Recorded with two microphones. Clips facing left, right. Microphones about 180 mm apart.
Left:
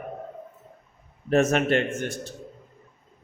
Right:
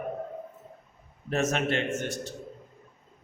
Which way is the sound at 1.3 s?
55° left (ahead or behind).